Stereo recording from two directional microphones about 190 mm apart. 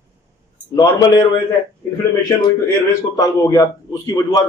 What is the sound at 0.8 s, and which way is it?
Speech, 20° left (ahead or behind).